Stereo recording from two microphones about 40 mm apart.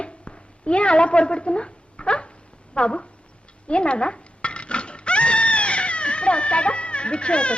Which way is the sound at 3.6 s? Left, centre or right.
Left.